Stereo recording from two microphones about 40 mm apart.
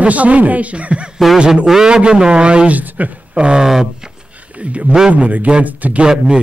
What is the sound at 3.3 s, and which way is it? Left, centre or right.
Speech, right.